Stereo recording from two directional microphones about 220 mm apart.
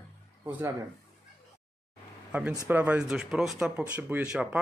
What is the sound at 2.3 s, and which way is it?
Speech, 5° right (ahead or behind).